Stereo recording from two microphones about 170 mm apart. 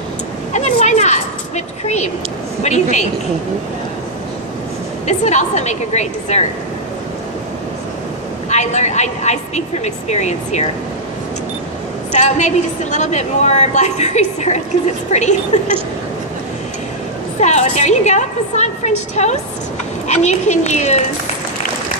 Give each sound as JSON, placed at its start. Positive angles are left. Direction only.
{"t": 0.5, "sound": "a sound", "side_deg": 45}
{"t": 2.6, "sound": "a woman's voice", "side_deg": 45}
{"t": 5.0, "sound": "a woman's voice", "side_deg": 45}
{"t": 8.5, "sound": "a woman's voice", "side_deg": 45}
{"t": 12.2, "sound": "a woman's voice", "side_deg": 45}
{"t": 17.4, "sound": "a woman's voice", "side_deg": 40}